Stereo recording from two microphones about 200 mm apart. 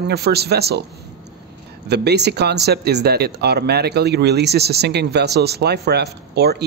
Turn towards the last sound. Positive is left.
turn(degrees=-55)  # may be behind; listen again after turning